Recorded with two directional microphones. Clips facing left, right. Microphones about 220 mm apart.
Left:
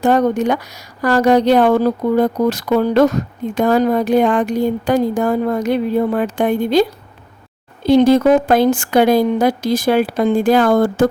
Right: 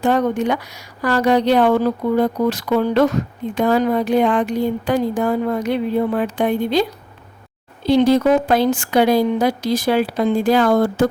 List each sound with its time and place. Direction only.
0.0 s speech: 40° left (ahead or behind)
7.9 s speech: 50° left (ahead or behind)